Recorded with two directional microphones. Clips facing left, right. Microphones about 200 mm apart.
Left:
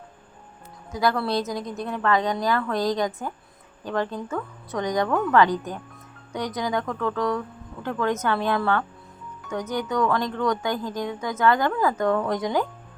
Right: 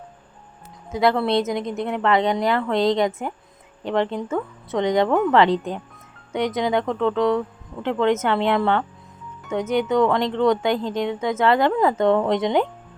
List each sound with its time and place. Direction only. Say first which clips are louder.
0.9 s speech: right 4 dB; 25° right (ahead or behind)